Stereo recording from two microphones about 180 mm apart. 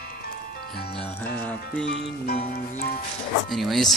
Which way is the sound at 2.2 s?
55° left (ahead or behind).